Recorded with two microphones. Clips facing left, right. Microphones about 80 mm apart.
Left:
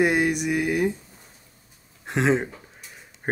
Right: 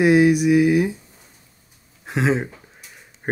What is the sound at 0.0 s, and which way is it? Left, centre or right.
Speech, centre.